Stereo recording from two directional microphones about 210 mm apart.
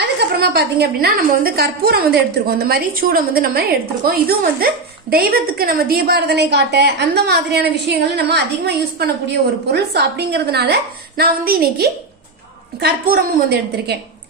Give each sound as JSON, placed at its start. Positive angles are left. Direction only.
{"t": 0.4, "sound": "a woman's voice", "side_deg": -50}